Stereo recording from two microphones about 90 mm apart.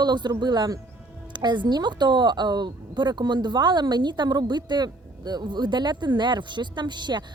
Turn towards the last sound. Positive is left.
turn(degrees=-55)  # may be behind; listen again after turning